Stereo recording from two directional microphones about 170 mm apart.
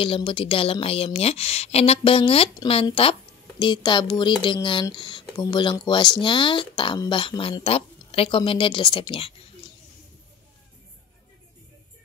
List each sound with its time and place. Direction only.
0.0 s speech: 30° left (ahead or behind)